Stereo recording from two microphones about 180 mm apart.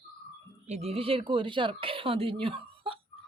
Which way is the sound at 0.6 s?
35° right (ahead or behind).